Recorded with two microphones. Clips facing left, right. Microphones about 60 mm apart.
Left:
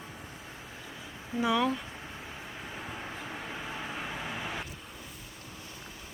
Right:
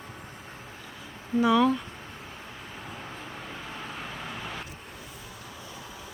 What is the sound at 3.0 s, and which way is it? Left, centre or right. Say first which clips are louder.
Vehicle: even; centre.